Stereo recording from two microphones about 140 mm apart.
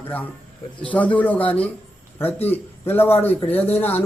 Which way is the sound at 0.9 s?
10° left (ahead or behind).